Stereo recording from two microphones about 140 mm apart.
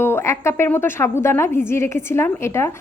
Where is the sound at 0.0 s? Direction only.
15° left (ahead or behind).